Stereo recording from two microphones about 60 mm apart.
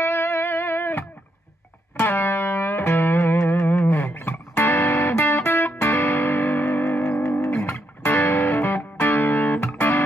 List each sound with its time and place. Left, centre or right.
0.0 s music: left